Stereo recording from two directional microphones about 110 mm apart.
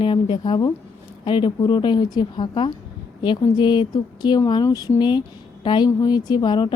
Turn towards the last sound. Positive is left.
turn(degrees=45)  # may be behind; listen again after turning